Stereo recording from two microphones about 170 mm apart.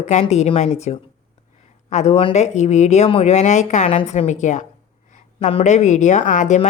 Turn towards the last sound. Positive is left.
turn(degrees=45)  # may be behind; listen again after turning